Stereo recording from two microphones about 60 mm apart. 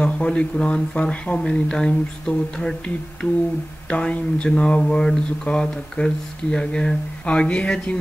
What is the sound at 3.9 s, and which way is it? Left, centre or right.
Speech, centre.